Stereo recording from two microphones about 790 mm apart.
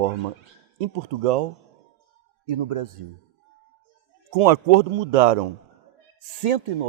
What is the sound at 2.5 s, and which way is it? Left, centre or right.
Speech, right.